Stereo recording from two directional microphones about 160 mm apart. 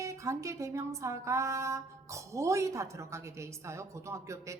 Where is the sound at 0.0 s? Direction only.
20° right (ahead or behind).